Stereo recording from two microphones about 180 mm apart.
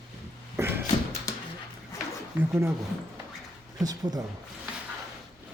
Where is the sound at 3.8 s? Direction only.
20° right (ahead or behind).